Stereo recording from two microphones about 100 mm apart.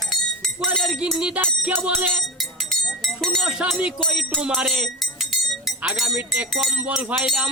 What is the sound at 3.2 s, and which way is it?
Speech, centre (ahead or behind).